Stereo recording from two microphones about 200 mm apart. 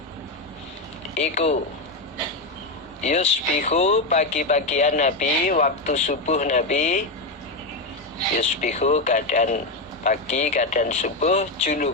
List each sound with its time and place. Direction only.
1.2 s speech: 35° left (ahead or behind)
3.0 s speech: 35° left (ahead or behind)
8.4 s speech: 35° left (ahead or behind)